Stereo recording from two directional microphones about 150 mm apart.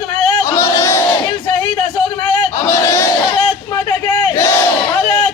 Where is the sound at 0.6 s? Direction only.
20° left (ahead or behind).